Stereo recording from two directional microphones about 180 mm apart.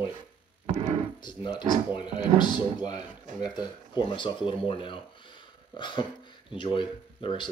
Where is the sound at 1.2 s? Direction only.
25° left (ahead or behind).